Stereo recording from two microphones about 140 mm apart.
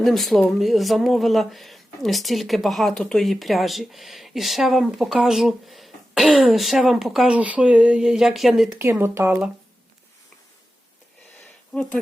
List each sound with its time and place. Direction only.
0.0 s speech: centre (ahead or behind)
8.8 s speech: 15° right (ahead or behind)
11.7 s speech: 10° left (ahead or behind)